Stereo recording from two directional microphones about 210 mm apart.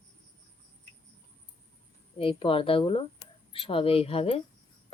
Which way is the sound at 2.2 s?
25° left (ahead or behind).